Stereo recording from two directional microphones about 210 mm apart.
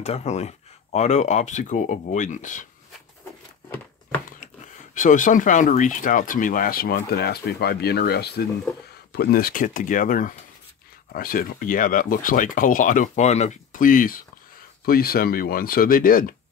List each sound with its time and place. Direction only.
0.0 s speech: 30° left (ahead or behind)
4.9 s speech: 40° left (ahead or behind)